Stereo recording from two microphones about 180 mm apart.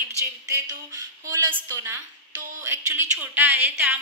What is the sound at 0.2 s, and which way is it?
A woman's voice, 15° right (ahead or behind).